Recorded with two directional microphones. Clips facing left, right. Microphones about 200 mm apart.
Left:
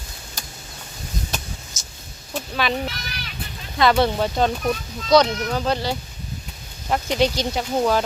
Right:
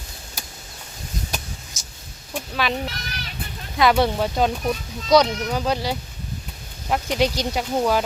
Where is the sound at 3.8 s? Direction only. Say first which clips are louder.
Even; 10° right (ahead or behind).